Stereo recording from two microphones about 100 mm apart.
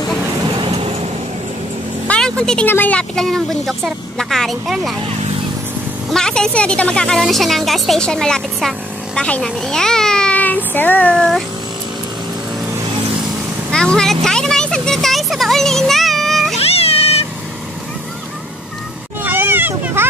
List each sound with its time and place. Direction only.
0.7 s vehicle: 80° right
2.0 s vehicle: 10° left (ahead or behind)
2.7 s speech: 15° left (ahead or behind); by 4.9 s centre (ahead or behind)
6.0 s a woman's voice: 5° left (ahead or behind)
13.7 s vehicle: 10° left (ahead or behind)
16.5 s cat: 90° left
19.2 s a sound: 20° right (ahead or behind)